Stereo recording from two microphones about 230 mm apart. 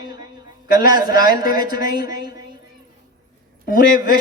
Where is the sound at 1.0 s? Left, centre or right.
Left.